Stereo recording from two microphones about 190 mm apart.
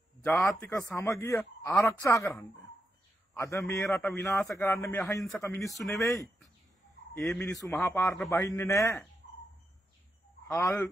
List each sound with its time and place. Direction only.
0.2 s a man's voice: 5° left (ahead or behind)
5.6 s speech: centre (ahead or behind)
5.9 s a man's voice: 15° left (ahead or behind)
7.2 s speech: centre (ahead or behind)
7.6 s a man's voice: 10° left (ahead or behind)
10.5 s a man's voice: 15° left (ahead or behind)